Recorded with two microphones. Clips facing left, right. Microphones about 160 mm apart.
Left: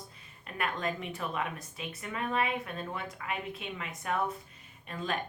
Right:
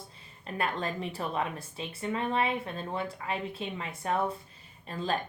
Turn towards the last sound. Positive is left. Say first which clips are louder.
# right 3 dB
turn(degrees=-30)  # may be behind; listen again after turning